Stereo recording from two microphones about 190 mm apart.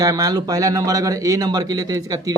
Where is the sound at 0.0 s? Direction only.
20° right (ahead or behind).